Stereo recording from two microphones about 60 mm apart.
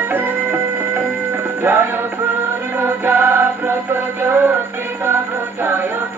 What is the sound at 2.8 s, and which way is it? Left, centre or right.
Chant, right.